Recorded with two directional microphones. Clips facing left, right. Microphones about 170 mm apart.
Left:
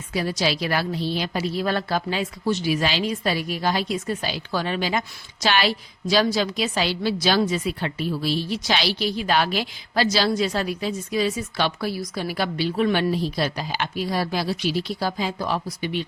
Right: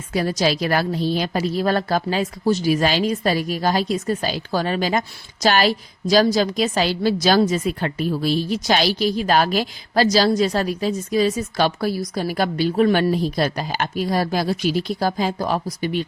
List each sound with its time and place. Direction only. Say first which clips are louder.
0.1 s a woman's voice: right 4 dB; 45° right (ahead or behind)